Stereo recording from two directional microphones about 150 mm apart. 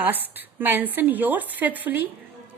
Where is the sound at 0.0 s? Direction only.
10° right (ahead or behind).